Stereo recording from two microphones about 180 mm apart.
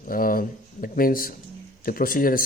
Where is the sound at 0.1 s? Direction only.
50° left (ahead or behind).